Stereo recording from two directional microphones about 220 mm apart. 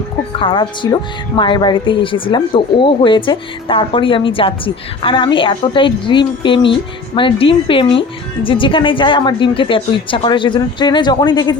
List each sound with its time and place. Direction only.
0.3 s speech: 20° left (ahead or behind)